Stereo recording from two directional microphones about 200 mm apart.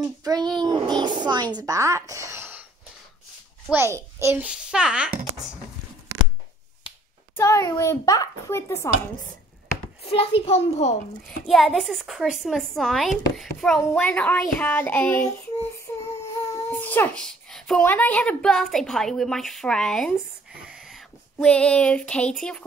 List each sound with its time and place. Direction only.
0.2 s a child's voice: 20° right (ahead or behind)
3.7 s a child's voice: 15° right (ahead or behind)
6.8 s finger snapping: 25° left (ahead or behind)
7.3 s a child's voice: 15° left (ahead or behind)
10.0 s a child's voice: 30° left (ahead or behind)
11.2 s a woman's voice: centre (ahead or behind)
16.7 s a child's voice: 10° left (ahead or behind)